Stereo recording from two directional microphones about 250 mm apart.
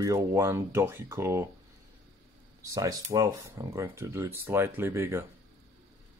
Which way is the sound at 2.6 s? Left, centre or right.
Centre.